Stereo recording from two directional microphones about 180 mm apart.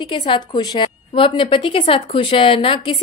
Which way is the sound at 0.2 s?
30° left (ahead or behind).